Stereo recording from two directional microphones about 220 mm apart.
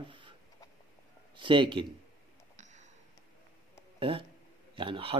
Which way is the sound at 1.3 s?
20° right (ahead or behind).